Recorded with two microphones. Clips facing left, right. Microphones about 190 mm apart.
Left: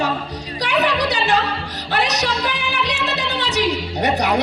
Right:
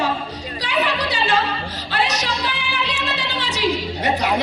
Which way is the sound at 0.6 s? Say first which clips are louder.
Left 3 dB; 70° left (ahead or behind).